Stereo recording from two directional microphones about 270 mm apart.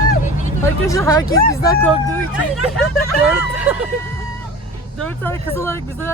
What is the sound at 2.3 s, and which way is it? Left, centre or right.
Speech, centre.